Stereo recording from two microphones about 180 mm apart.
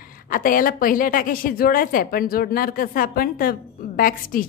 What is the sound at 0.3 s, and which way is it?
A woman's voice, 50° left (ahead or behind).